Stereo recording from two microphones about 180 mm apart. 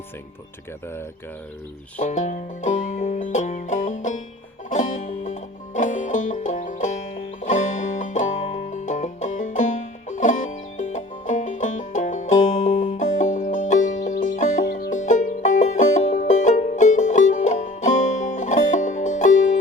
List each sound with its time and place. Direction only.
2.0 s music: 40° left (ahead or behind)